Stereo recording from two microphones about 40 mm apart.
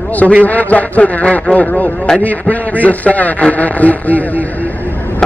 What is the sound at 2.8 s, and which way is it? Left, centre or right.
A man's voice, left.